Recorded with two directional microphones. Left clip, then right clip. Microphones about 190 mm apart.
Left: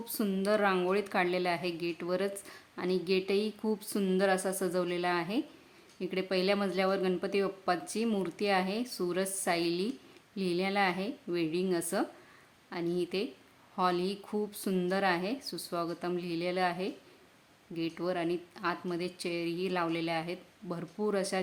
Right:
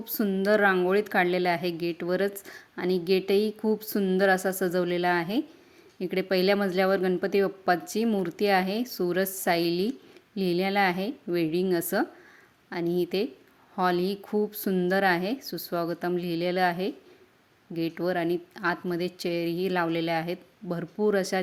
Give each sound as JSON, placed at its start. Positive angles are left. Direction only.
{"t": 0.0, "sound": "a woman's voice", "side_deg": -20}